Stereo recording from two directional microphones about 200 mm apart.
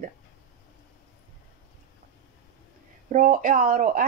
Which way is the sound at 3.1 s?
40° right (ahead or behind).